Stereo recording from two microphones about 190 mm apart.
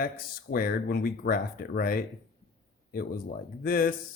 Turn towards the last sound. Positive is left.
turn(degrees=50)  # may be behind; listen again after turning